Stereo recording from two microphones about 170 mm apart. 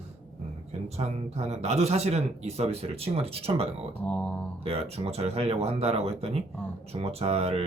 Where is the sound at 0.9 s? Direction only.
40° right (ahead or behind).